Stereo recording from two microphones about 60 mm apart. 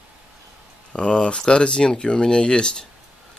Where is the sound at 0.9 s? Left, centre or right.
Centre.